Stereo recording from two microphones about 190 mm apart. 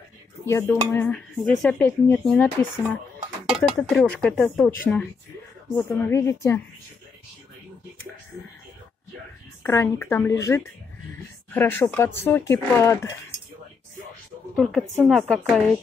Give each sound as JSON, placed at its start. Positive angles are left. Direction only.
{"t": 0.5, "sound": "dishes", "side_deg": 15}
{"t": 3.5, "sound": "speech", "side_deg": 0}
{"t": 4.6, "sound": "dishes", "side_deg": 5}
{"t": 9.6, "sound": "dishes", "side_deg": 15}
{"t": 14.6, "sound": "speech", "side_deg": 0}